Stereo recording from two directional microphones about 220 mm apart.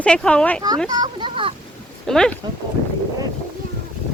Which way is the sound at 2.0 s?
5° left (ahead or behind).